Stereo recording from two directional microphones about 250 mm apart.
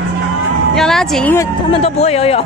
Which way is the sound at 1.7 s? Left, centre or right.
Left.